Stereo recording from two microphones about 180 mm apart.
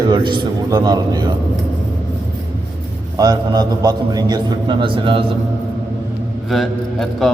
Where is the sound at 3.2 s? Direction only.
20° right (ahead or behind).